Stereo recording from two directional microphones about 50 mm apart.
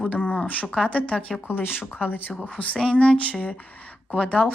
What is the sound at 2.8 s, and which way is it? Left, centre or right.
Speech, centre.